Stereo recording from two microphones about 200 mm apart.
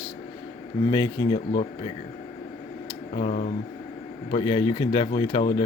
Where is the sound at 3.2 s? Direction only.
35° left (ahead or behind).